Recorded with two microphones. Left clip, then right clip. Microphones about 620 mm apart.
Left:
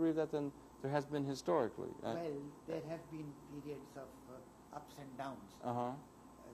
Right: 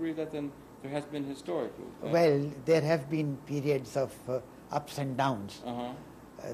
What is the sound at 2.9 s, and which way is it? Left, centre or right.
Speech, right.